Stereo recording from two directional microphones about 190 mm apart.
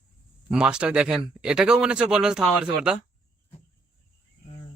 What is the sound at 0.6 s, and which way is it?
Speech, 5° right (ahead or behind).